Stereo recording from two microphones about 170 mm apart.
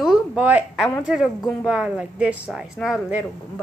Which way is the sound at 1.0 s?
5° right (ahead or behind).